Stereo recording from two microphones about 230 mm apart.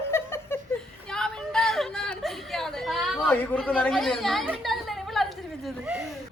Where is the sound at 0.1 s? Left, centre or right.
Centre.